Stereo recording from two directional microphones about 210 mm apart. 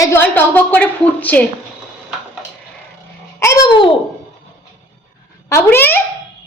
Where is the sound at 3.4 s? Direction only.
20° left (ahead or behind).